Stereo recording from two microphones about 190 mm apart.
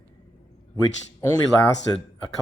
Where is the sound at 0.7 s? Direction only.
20° left (ahead or behind).